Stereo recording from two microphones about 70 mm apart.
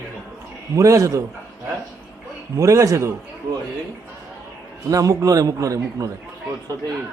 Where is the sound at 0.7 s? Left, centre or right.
Right.